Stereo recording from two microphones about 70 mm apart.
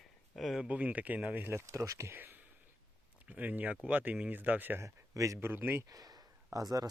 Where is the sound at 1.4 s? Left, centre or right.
Right.